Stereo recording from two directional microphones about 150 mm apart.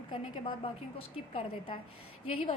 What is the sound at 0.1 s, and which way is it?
A woman's voice, 35° left (ahead or behind).